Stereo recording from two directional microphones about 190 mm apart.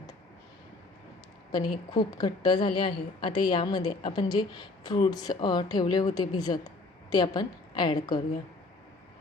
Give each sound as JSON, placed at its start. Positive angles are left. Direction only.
{"t": 1.5, "sound": "a woman's voice", "side_deg": 20}